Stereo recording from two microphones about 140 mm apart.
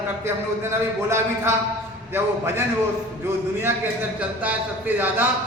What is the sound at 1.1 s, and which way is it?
Speech, 15° right (ahead or behind).